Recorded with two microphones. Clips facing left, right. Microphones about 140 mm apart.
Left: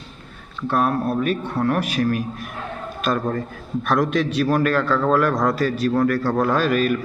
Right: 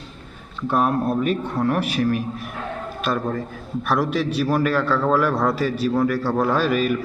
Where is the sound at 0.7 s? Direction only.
15° right (ahead or behind).